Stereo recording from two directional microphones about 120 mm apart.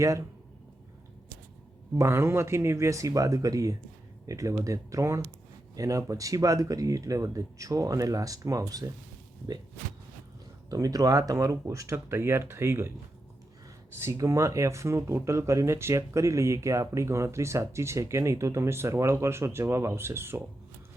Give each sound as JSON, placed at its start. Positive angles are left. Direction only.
{"t": 2.0, "sound": "speech", "side_deg": -20}
{"t": 10.7, "sound": "speech", "side_deg": -30}
{"t": 14.0, "sound": "speech", "side_deg": -25}